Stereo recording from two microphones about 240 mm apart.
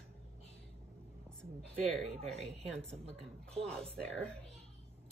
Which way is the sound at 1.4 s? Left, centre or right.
Centre.